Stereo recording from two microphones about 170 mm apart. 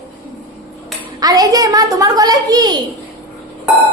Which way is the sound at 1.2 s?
20° right (ahead or behind).